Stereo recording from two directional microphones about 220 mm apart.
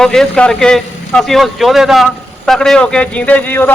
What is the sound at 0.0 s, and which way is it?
A man's voice, centre (ahead or behind).